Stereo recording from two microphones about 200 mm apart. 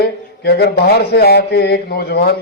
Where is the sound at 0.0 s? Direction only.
55° left (ahead or behind).